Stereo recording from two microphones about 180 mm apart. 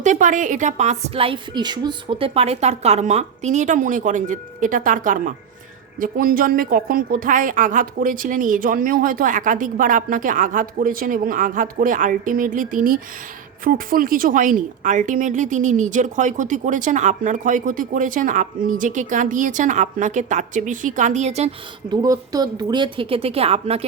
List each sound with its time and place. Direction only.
0.0 s a woman's voice: 45° right (ahead or behind)
21.8 s a woman's voice: 20° right (ahead or behind)